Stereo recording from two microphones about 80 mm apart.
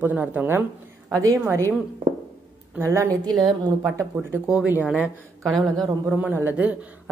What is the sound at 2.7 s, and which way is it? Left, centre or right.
Speech, right.